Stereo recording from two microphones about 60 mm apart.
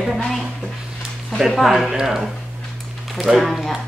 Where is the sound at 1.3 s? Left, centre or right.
Centre.